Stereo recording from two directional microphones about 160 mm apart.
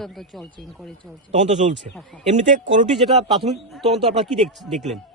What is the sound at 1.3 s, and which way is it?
Speech, 50° right (ahead or behind).